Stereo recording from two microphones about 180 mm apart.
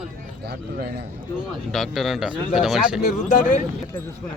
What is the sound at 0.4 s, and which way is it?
Speech, 65° right (ahead or behind).